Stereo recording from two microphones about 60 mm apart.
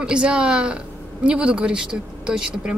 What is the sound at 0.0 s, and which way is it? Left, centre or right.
Speech, centre.